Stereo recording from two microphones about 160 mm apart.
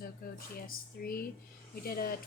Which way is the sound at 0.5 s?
65° left (ahead or behind).